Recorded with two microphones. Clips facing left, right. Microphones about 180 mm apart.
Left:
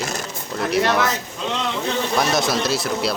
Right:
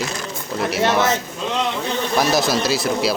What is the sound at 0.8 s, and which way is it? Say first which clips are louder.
Speech: right 5 dB; 25° right (ahead or behind).